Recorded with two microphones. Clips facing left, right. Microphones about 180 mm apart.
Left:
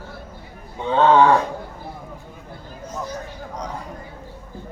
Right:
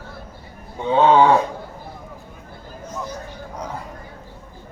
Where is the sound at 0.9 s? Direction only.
10° right (ahead or behind).